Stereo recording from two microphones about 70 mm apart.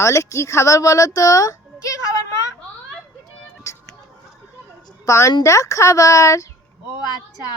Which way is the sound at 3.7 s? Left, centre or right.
Left.